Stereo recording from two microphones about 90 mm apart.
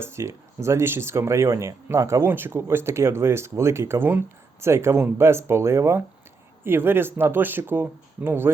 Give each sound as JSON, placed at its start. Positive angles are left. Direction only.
{"t": 0.0, "sound": "speech", "side_deg": -30}